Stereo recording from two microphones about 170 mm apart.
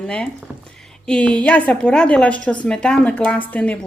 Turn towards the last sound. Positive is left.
turn(degrees=10)  # may be behind; listen again after turning